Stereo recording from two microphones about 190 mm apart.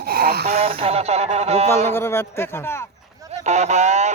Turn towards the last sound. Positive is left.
turn(degrees=-40)  # may be behind; listen again after turning